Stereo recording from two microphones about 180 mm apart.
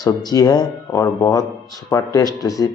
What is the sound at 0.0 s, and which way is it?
Speech, 20° left (ahead or behind).